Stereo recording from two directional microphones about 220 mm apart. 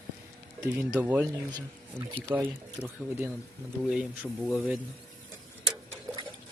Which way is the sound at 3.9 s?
5° right (ahead or behind).